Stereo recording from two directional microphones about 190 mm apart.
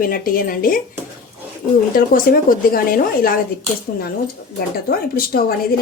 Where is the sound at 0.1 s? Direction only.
50° left (ahead or behind).